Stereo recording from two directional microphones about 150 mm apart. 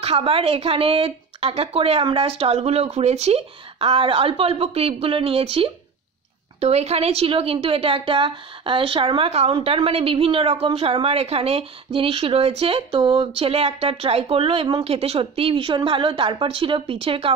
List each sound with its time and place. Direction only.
0.0 s a woman's voice: 40° right (ahead or behind)